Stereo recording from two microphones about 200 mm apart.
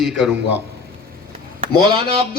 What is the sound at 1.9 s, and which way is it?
Speech, 25° right (ahead or behind).